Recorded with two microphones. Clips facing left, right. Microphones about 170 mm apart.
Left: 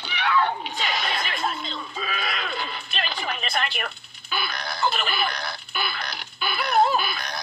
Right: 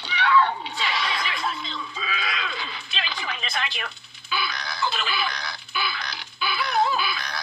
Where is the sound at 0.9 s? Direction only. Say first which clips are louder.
Even; 50° left (ahead or behind).